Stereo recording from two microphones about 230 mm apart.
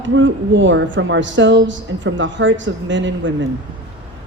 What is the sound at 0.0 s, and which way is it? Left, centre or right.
A woman's voice, right.